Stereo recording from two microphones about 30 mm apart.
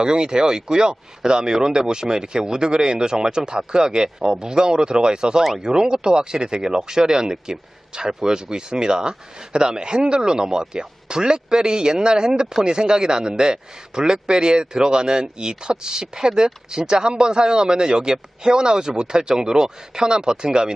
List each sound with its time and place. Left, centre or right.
0.0 s a man's voice: right